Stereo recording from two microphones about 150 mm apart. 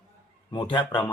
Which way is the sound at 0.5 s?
30° left (ahead or behind).